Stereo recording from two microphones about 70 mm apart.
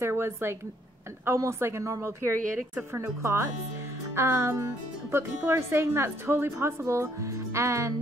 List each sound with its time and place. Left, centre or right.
0.0 s a woman's voice: right